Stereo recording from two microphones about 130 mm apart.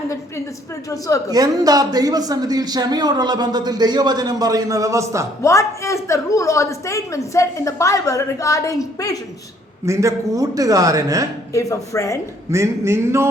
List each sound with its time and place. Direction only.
0.9 s a woman's voice: 25° left (ahead or behind)
1.3 s a man's voice: 30° right (ahead or behind)
5.4 s a woman's voice: 20° left (ahead or behind)
9.8 s a man's voice: 25° right (ahead or behind)
11.5 s a woman's voice: 25° left (ahead or behind)
12.5 s a man's voice: 20° right (ahead or behind)